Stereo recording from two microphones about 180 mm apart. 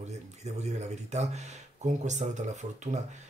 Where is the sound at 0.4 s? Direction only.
35° right (ahead or behind).